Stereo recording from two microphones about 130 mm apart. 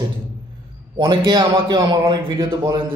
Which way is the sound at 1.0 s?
35° right (ahead or behind).